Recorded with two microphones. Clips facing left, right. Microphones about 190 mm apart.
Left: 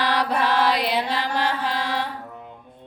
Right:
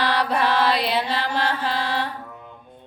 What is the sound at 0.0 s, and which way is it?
Mantra, 10° left (ahead or behind).